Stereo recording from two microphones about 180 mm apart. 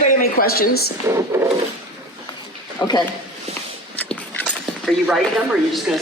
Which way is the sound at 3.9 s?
5° left (ahead or behind).